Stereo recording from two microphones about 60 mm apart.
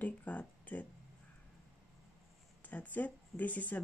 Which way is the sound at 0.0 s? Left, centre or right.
Left.